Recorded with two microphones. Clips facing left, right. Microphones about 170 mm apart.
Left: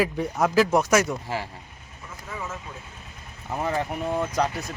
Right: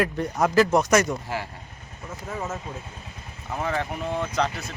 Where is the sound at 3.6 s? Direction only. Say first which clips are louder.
Left 1 dB; 10° left (ahead or behind).